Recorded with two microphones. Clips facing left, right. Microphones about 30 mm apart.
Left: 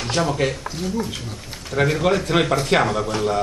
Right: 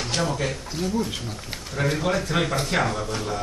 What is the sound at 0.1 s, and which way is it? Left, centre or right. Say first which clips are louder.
Speech: left 6 dB; left.